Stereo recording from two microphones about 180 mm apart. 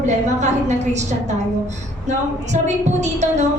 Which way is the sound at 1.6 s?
40° right (ahead or behind).